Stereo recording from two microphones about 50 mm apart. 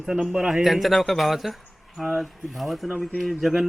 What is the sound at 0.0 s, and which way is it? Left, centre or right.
Speech, centre.